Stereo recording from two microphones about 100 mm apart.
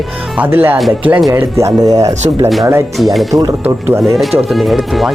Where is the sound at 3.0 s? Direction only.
Centre (ahead or behind).